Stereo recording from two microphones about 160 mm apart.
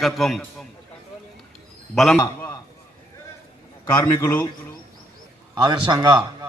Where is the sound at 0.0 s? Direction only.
Centre (ahead or behind).